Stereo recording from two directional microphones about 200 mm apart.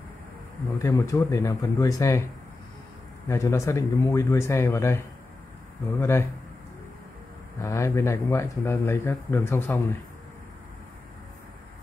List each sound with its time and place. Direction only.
0.7 s speech: 15° left (ahead or behind)
3.3 s speech: 15° left (ahead or behind)
7.6 s speech: 15° left (ahead or behind)